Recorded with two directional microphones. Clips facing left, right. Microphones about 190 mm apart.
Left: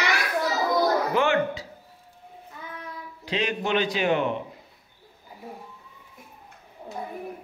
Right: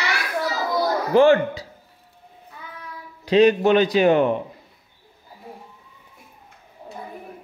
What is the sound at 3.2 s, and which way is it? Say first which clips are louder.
Speech: right 13 dB; 40° right (ahead or behind).